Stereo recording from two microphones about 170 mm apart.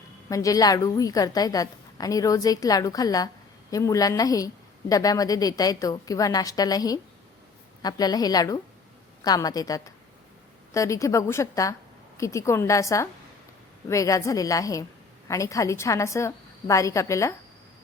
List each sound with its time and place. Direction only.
0.3 s a woman's voice: 20° left (ahead or behind)